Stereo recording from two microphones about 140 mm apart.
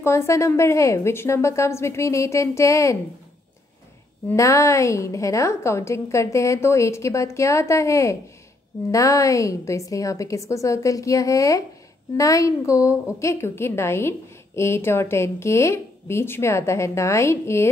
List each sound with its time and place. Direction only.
0.0 s a woman's voice: 20° left (ahead or behind)
4.3 s a woman's voice: 20° left (ahead or behind)